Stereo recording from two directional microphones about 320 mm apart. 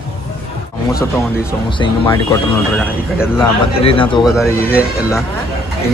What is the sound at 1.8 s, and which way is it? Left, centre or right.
Speech, centre.